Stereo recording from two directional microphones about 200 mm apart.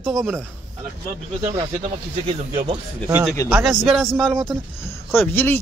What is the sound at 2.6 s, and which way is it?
Speech, 25° right (ahead or behind).